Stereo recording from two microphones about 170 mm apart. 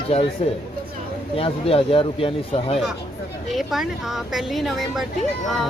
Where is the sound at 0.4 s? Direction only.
35° left (ahead or behind).